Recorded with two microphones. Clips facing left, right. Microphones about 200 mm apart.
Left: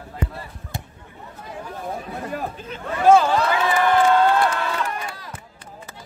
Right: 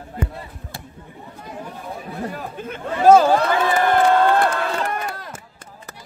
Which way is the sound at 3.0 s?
40° right (ahead or behind).